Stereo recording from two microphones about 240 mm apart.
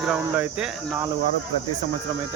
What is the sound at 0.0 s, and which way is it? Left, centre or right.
Speech, centre.